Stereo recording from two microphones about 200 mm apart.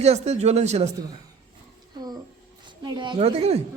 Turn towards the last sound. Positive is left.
turn(degrees=-30)  # may be behind; listen again after turning